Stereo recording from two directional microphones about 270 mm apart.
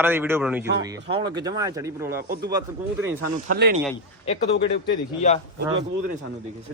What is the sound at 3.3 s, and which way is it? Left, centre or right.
Speech, right.